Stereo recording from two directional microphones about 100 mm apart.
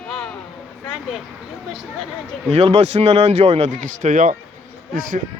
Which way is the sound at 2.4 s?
90° right.